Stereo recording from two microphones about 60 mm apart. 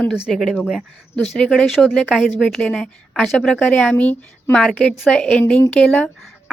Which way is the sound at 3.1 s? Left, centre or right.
Centre.